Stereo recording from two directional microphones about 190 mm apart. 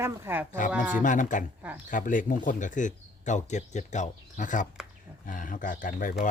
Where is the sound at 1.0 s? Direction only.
45° left (ahead or behind).